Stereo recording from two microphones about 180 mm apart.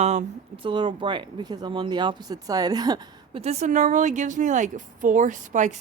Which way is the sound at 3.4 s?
40° right (ahead or behind).